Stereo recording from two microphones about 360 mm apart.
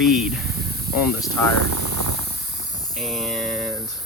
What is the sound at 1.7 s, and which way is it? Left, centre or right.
Spray, right.